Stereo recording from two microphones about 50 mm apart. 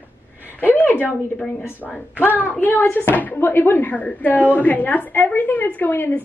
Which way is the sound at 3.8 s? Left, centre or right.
Left.